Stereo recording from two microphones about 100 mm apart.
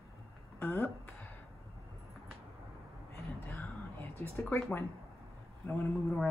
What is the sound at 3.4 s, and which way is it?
Whispering, 20° left (ahead or behind).